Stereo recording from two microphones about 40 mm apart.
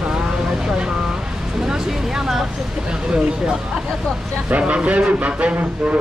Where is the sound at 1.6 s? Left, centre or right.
Centre.